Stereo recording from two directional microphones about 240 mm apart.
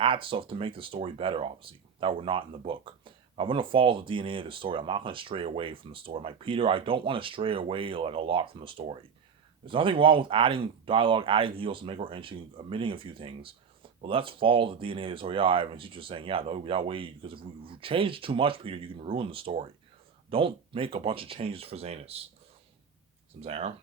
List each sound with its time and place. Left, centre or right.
0.0 s speech: right
23.4 s speech: right